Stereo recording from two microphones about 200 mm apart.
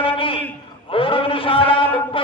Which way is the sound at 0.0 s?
25° left (ahead or behind).